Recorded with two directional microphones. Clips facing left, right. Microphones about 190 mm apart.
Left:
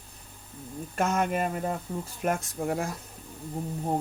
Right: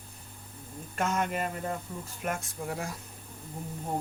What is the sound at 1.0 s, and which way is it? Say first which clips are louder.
Speech: left 3 dB; 45° left (ahead or behind).